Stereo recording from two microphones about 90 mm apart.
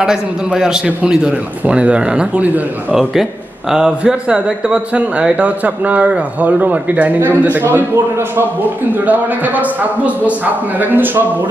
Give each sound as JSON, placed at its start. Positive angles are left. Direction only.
{"t": 0.0, "sound": "a man's voice", "side_deg": -10}